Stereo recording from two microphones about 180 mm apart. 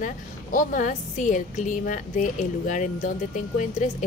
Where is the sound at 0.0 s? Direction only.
50° left (ahead or behind).